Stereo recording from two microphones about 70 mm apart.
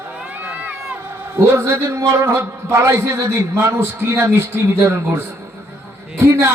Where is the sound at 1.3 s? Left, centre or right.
Right.